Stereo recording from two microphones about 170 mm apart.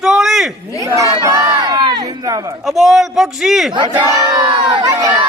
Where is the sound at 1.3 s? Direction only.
20° right (ahead or behind).